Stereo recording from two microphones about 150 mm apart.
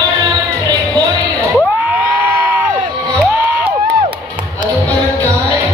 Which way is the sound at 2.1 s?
10° right (ahead or behind).